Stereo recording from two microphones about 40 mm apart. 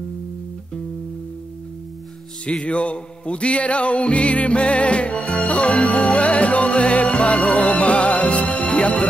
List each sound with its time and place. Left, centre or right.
2.6 s music: left